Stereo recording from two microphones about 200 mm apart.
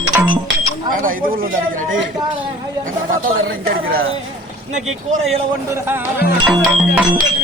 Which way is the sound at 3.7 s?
50° right (ahead or behind).